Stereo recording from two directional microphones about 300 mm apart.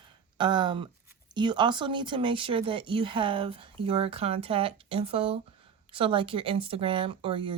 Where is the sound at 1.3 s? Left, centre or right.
Centre.